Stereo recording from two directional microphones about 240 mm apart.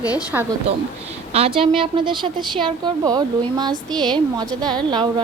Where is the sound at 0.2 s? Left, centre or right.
Centre.